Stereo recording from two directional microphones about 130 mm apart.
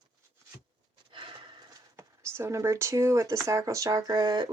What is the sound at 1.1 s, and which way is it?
Horse, 40° right (ahead or behind).